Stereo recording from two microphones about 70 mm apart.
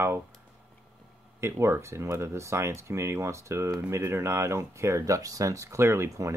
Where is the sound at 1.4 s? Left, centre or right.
Right.